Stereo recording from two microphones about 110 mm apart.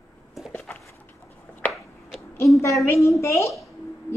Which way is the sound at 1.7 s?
Centre (ahead or behind).